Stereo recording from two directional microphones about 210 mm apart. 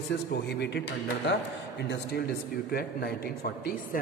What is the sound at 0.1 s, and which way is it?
Speech, 50° left (ahead or behind).